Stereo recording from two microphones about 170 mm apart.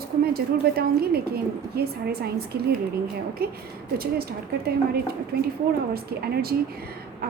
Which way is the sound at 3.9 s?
65° right (ahead or behind).